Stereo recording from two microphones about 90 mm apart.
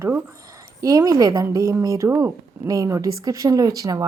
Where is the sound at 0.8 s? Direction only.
40° right (ahead or behind).